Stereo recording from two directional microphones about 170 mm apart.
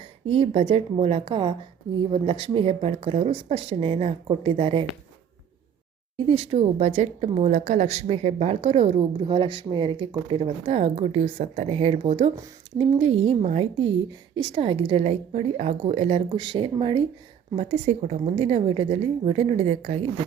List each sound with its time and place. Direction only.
0.3 s a woman's voice: 35° right (ahead or behind)
6.1 s a woman's voice: 35° right (ahead or behind)